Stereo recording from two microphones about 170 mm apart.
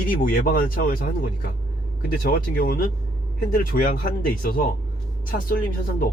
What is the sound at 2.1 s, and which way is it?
Speech, 55° left (ahead or behind).